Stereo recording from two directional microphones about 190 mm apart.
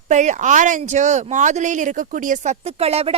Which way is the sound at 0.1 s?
40° right (ahead or behind).